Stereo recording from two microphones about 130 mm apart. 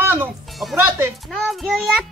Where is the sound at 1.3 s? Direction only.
Centre (ahead or behind).